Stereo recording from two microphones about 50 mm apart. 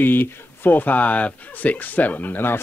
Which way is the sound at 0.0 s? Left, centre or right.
Left.